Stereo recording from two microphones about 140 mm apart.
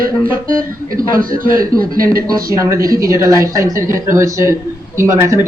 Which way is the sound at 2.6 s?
20° right (ahead or behind).